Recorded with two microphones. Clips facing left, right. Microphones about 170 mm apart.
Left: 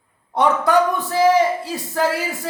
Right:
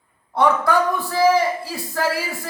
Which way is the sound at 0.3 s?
20° left (ahead or behind).